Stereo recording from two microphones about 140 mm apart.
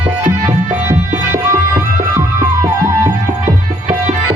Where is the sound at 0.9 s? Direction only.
15° right (ahead or behind).